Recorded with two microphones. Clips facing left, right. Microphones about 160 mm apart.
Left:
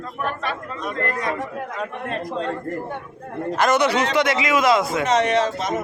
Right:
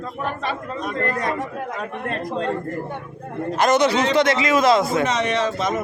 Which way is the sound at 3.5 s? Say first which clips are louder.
Right 1 dB; 20° right (ahead or behind).